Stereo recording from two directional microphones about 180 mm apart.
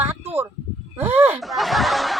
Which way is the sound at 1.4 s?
Centre (ahead or behind).